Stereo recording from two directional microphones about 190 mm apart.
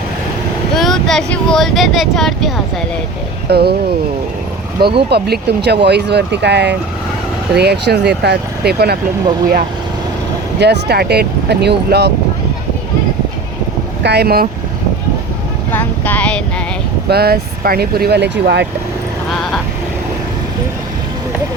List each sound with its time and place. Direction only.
0.8 s speech: centre (ahead or behind)
3.5 s speech: 55° right (ahead or behind)
5.0 s speech: 60° right (ahead or behind)
10.6 s speech: 60° right (ahead or behind)
14.0 s speech: 60° right (ahead or behind)
15.7 s vehicle: 10° left (ahead or behind)
17.1 s speech: 55° right (ahead or behind)